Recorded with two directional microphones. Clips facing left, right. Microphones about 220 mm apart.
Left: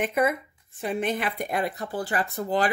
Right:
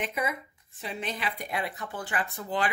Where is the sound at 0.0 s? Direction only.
55° left (ahead or behind).